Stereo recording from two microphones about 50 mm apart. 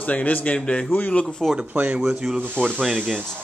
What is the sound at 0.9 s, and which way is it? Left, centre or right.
Speech, left.